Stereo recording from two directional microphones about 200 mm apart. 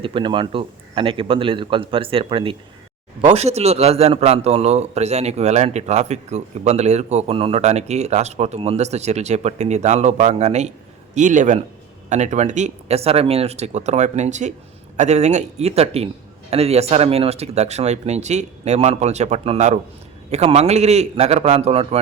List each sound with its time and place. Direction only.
0.0 s a man's voice: 25° right (ahead or behind)